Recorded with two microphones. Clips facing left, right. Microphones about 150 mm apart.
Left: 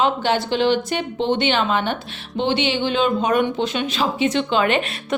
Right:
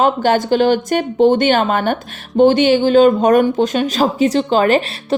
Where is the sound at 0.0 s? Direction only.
45° right (ahead or behind).